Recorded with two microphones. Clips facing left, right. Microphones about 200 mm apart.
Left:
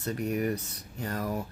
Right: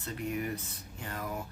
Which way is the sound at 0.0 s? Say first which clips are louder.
Left 6 dB; 45° left (ahead or behind).